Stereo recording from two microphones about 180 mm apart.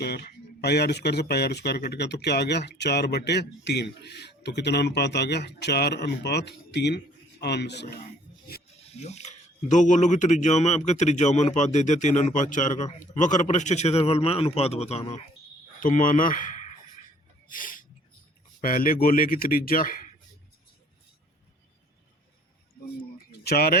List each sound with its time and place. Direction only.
0.6 s speech: 65° left (ahead or behind)
8.9 s speech: 35° left (ahead or behind)
15.8 s a man's voice: 45° left (ahead or behind)
17.5 s a sound: 50° left (ahead or behind)
18.6 s a man's voice: 55° left (ahead or behind)
23.4 s speech: 60° left (ahead or behind)